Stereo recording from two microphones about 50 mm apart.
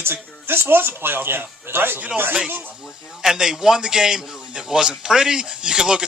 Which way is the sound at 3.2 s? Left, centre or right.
Centre.